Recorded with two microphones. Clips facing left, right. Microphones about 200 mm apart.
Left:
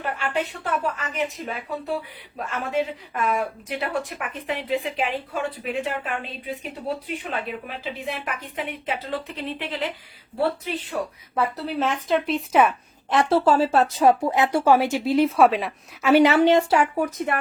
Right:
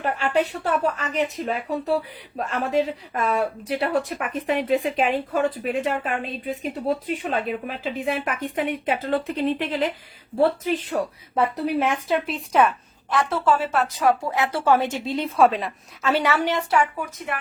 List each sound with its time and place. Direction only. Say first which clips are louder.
0.0 s a woman's voice: right 4 dB; 40° right (ahead or behind)
10.9 s speech: right 1 dB; 40° right (ahead or behind)
11.3 s speech: right 3 dB; 15° right (ahead or behind); by 12.7 s 5° left (ahead or behind)
13.1 s speech: left 3 dB; 30° left (ahead or behind); by 16.1 s 5° left (ahead or behind)
16.1 s a woman's voice: left 8 dB; 20° left (ahead or behind)